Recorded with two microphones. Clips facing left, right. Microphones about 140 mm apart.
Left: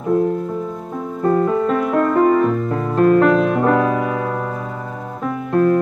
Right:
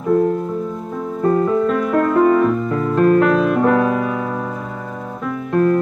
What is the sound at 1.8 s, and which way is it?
Music, 30° left (ahead or behind).